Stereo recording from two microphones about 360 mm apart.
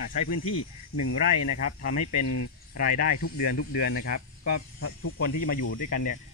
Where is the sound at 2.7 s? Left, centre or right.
Left.